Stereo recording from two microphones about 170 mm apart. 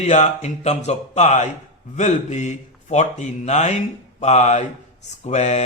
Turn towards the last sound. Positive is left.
turn(degrees=40)  # may be behind; listen again after turning